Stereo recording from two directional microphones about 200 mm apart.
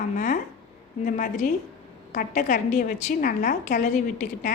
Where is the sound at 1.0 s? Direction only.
40° left (ahead or behind).